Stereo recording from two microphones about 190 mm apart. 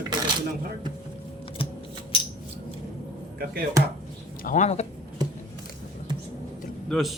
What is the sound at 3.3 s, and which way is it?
Speech, 55° right (ahead or behind).